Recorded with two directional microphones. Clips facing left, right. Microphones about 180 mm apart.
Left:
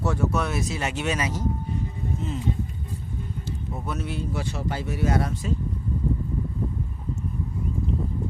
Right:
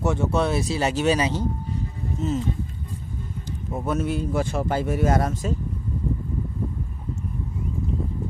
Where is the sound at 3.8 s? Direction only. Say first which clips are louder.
Right 7 dB; 45° right (ahead or behind).